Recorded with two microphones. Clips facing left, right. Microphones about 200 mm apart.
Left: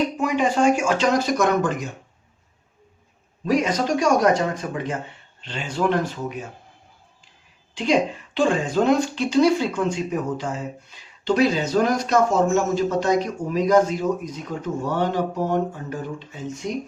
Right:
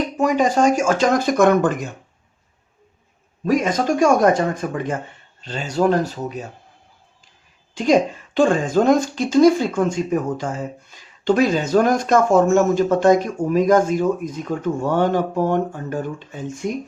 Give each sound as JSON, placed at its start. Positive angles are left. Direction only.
{"t": 0.2, "sound": "speech", "side_deg": -40}
{"t": 3.4, "sound": "speech", "side_deg": -50}
{"t": 7.8, "sound": "speech", "side_deg": -45}